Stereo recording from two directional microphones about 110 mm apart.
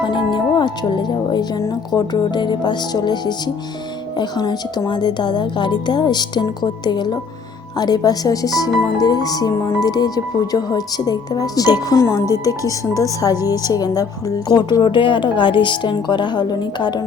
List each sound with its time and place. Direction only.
0.0 s speech: 45° left (ahead or behind)